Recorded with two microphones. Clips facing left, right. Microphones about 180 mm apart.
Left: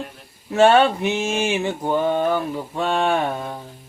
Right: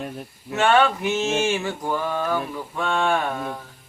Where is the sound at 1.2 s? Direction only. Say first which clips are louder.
Left 1 dB; 15° left (ahead or behind).